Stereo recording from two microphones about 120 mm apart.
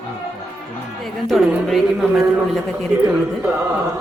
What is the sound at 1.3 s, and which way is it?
Speech, centre (ahead or behind).